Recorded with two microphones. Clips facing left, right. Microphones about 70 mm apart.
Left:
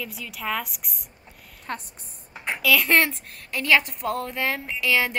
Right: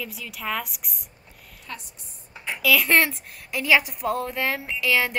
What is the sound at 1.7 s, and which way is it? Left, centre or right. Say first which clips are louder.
Speech: left 6 dB; left.